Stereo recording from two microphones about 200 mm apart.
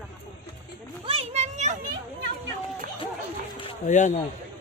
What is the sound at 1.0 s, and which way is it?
Speech, 30° right (ahead or behind).